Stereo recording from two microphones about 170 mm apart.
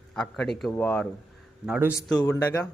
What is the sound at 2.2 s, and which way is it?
Speech, 10° left (ahead or behind).